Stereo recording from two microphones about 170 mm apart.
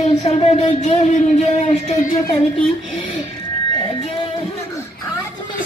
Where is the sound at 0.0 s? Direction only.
40° left (ahead or behind).